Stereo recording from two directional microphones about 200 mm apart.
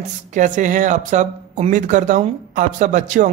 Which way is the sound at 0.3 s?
40° right (ahead or behind).